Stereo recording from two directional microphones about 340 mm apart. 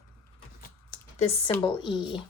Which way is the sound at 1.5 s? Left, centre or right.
Centre.